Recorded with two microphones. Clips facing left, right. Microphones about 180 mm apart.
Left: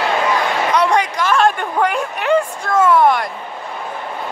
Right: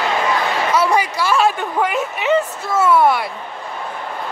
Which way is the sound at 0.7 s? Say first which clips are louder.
Left 1 dB; 5° right (ahead or behind).